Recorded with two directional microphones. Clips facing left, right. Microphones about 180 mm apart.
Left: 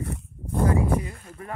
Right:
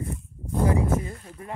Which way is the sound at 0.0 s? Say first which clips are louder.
Left 1 dB; 70° left (ahead or behind).